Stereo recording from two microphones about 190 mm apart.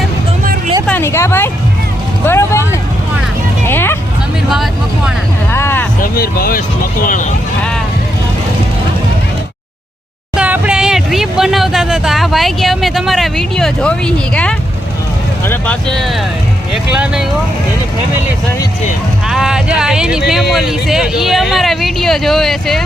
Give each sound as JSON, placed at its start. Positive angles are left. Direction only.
{"t": 0.9, "sound": "a sound", "side_deg": 10}
{"t": 2.2, "sound": "vehicle", "side_deg": 15}
{"t": 3.7, "sound": "hubbub", "side_deg": 10}
{"t": 4.4, "sound": "vehicle", "side_deg": 0}
{"t": 5.5, "sound": "a sound", "side_deg": 10}
{"t": 6.0, "sound": "speech", "side_deg": 50}
{"t": 10.3, "sound": "speech", "side_deg": -5}
{"t": 19.3, "sound": "speech", "side_deg": -5}